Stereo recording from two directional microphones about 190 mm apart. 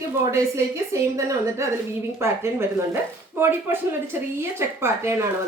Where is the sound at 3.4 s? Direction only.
10° right (ahead or behind).